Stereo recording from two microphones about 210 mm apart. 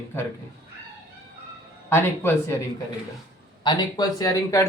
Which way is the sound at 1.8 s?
10° left (ahead or behind).